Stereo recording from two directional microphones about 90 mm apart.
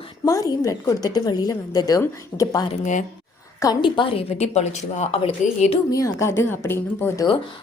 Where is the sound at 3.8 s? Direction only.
70° left (ahead or behind).